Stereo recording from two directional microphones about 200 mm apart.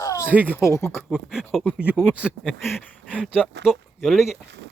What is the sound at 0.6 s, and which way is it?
Speech, 15° left (ahead or behind).